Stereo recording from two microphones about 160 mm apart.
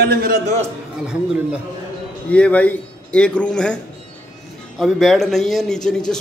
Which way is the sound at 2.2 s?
10° left (ahead or behind).